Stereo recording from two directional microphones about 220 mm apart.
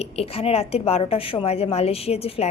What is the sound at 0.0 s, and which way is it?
A woman's voice, 25° left (ahead or behind).